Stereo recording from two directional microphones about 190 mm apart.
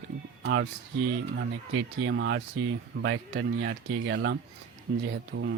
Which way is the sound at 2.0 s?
80° right.